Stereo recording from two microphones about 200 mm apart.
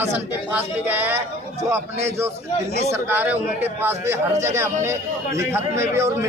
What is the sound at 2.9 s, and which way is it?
A man's voice, 10° right (ahead or behind).